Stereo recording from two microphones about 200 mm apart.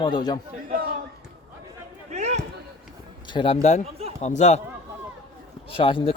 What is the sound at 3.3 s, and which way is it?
Speech, 25° left (ahead or behind).